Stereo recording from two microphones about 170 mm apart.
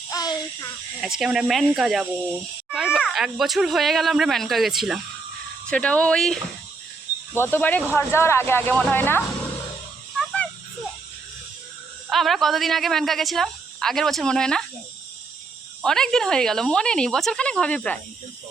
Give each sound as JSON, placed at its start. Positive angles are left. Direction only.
{"t": 0.1, "sound": "a sound", "side_deg": 20}
{"t": 1.0, "sound": "a woman's voice", "side_deg": -5}
{"t": 7.3, "sound": "speech", "side_deg": 15}
{"t": 10.2, "sound": "a sound", "side_deg": 5}
{"t": 12.0, "sound": "a woman's voice", "side_deg": 0}
{"t": 15.8, "sound": "a woman's voice", "side_deg": 5}